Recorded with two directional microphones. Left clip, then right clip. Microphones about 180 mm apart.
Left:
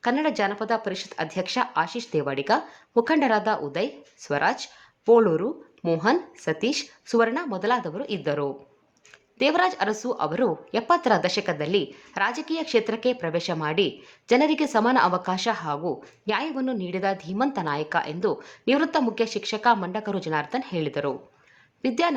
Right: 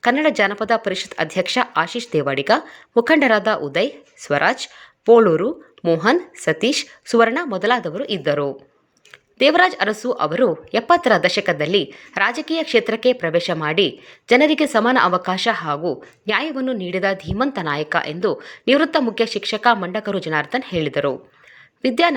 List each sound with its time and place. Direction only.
0.0 s a woman's voice: 15° right (ahead or behind)